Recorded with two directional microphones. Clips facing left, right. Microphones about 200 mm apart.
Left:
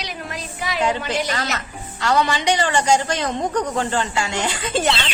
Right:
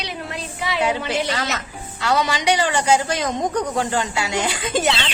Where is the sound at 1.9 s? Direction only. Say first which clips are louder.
Left 1 dB; 10° right (ahead or behind).